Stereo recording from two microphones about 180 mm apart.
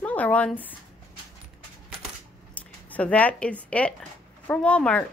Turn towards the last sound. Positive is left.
turn(degrees=5)  # may be behind; listen again after turning